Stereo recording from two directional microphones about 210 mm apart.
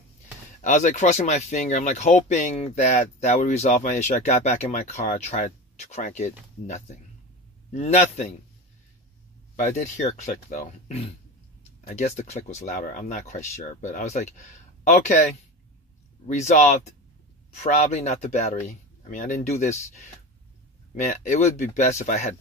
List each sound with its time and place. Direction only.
0.6 s speech: 35° left (ahead or behind)
9.8 s speech: 35° left (ahead or behind)
16.3 s speech: 35° left (ahead or behind)
20.9 s speech: 35° left (ahead or behind)